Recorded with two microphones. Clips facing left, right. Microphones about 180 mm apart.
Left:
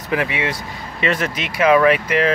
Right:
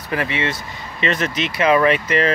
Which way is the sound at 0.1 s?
15° left (ahead or behind).